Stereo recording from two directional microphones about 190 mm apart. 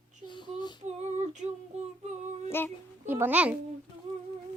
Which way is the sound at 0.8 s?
35° right (ahead or behind).